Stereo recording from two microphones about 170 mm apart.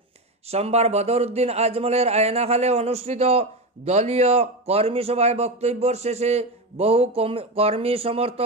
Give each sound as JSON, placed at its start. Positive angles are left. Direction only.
{"t": 0.5, "sound": "a man's voice", "side_deg": -40}